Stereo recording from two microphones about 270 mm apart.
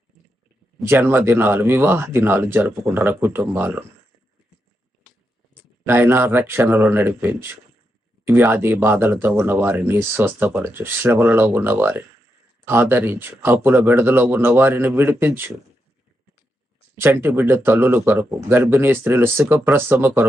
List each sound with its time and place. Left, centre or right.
0.8 s speech: centre
5.8 s speech: centre
17.0 s speech: centre